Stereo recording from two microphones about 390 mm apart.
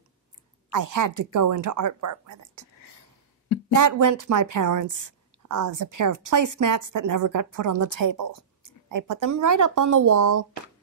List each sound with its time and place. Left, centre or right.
0.7 s a woman's voice: right
3.7 s a woman's voice: right